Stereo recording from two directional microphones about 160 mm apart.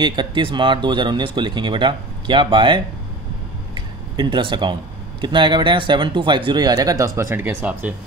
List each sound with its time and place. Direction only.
0.0 s speech: 30° right (ahead or behind)
3.7 s a sound: 30° right (ahead or behind)
5.2 s speech: 30° right (ahead or behind); by 7.9 s 10° right (ahead or behind)